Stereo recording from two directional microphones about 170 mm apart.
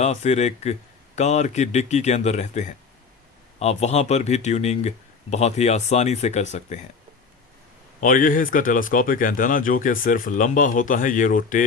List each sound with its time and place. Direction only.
0.0 s speech: 40° left (ahead or behind)
8.0 s speech: 55° left (ahead or behind)